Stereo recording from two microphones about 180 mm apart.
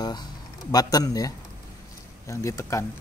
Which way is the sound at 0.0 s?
25° left (ahead or behind).